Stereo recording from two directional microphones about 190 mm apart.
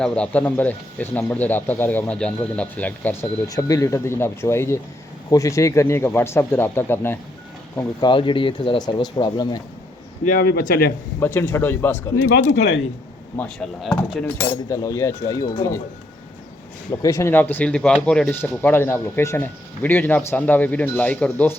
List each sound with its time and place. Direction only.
0.0 s speech: 5° left (ahead or behind)
8.0 s speech: 25° left (ahead or behind)
10.2 s a man's voice: 50° left (ahead or behind)
11.2 s speech: 10° left (ahead or behind)
13.3 s speech: 5° left (ahead or behind)
14.7 s speech: 15° left (ahead or behind)
17.0 s speech: 15° left (ahead or behind)